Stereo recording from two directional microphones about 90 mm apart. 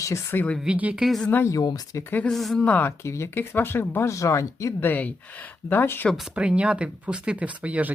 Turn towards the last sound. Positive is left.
turn(degrees=-15)  # may be behind; listen again after turning